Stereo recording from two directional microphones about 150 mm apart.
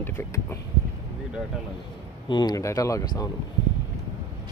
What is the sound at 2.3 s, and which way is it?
Speech, 30° left (ahead or behind).